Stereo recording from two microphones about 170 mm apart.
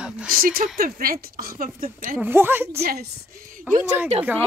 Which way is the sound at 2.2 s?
10° right (ahead or behind).